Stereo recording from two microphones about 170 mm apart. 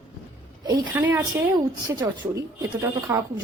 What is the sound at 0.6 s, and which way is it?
Speech, 15° right (ahead or behind).